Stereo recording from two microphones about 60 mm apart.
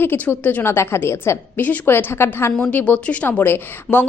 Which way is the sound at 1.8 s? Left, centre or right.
Left.